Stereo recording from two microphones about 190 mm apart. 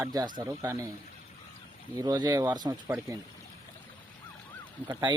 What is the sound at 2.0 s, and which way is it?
Speech, 20° right (ahead or behind).